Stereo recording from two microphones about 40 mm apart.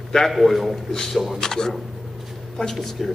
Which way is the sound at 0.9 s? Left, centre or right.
Centre.